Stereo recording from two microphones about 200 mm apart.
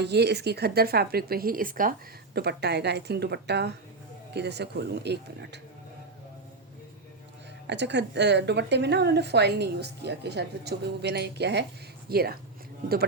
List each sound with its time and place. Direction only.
0.0 s a woman's voice: 55° right (ahead or behind)
7.7 s a woman's voice: 60° right (ahead or behind)